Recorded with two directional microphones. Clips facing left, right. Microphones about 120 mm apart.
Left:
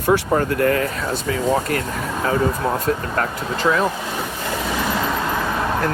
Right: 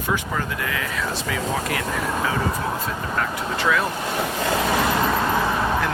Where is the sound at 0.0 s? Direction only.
50° left (ahead or behind).